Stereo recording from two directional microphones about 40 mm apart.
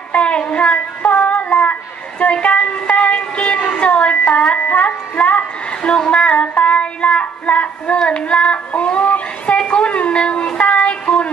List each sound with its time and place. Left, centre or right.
0.1 s child singing: left
2.4 s music: left
3.7 s a sound: left
4.3 s music: left
5.4 s child singing: left
9.6 s a sound: left